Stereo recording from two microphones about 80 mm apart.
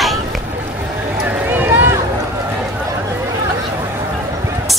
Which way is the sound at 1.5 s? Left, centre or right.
Right.